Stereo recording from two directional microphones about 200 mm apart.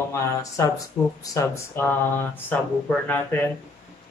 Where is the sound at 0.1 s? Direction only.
15° left (ahead or behind).